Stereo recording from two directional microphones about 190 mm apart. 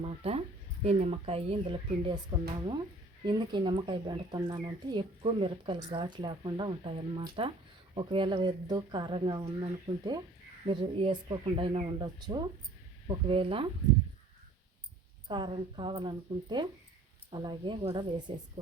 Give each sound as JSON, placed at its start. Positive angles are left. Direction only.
{"t": 0.0, "sound": "speech", "side_deg": -30}
{"t": 15.3, "sound": "speech", "side_deg": -25}